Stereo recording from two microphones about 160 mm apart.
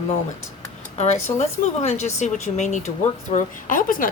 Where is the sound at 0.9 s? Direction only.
45° left (ahead or behind).